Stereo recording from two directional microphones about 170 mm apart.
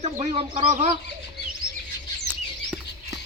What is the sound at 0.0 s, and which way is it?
Speech, 35° right (ahead or behind).